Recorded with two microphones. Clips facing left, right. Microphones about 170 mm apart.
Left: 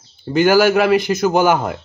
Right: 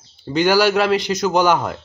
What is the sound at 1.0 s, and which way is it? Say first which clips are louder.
Speech: left 3 dB; 55° left (ahead or behind).